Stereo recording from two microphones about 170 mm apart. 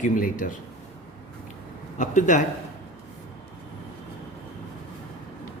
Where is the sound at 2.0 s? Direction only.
45° left (ahead or behind).